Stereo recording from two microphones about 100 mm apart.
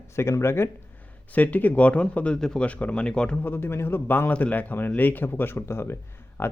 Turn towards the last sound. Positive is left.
turn(degrees=25)  # may be behind; listen again after turning